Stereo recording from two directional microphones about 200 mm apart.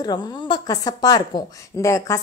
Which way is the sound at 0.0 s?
20° left (ahead or behind).